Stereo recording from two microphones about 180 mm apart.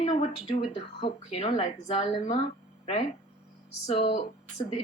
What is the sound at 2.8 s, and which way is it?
Speech, 40° left (ahead or behind).